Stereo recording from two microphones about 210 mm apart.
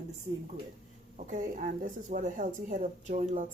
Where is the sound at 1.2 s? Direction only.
40° right (ahead or behind).